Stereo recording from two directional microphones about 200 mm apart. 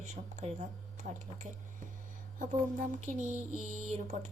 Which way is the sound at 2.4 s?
40° right (ahead or behind).